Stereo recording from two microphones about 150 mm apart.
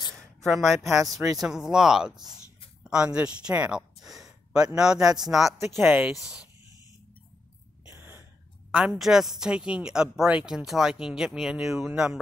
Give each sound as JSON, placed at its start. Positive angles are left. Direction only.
{"t": 0.1, "sound": "a sound", "side_deg": 0}
{"t": 1.1, "sound": "speech", "side_deg": -25}
{"t": 1.4, "sound": "speech", "side_deg": -5}
{"t": 7.9, "sound": "whispering", "side_deg": -15}
{"t": 8.7, "sound": "speech", "side_deg": -5}